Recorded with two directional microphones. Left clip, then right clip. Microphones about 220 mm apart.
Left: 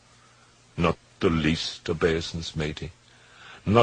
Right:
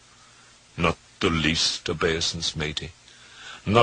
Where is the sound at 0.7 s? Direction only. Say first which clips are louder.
Right 1 dB; 25° right (ahead or behind).